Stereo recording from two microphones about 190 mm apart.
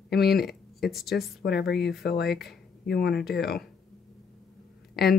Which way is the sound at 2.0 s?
60° left (ahead or behind).